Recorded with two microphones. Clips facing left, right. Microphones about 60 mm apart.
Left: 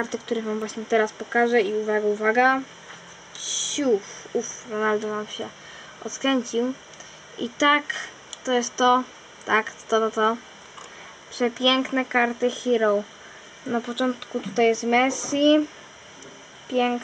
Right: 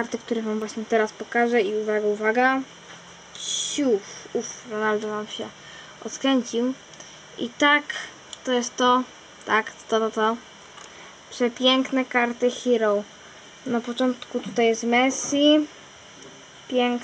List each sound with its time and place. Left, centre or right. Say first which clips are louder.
0.0 s speech: even; centre
3.8 s speech: even; centre
6.0 s speech: right 1 dB; centre
7.6 s speech: even; centre
11.9 s speech: even; centre
16.7 s speech: even; centre